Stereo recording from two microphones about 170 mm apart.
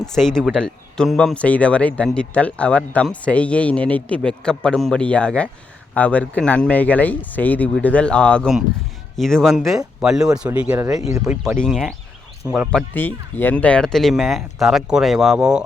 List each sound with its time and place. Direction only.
0.0 s speech: 5° left (ahead or behind)
11.0 s speech: 20° right (ahead or behind)
11.4 s speech: centre (ahead or behind)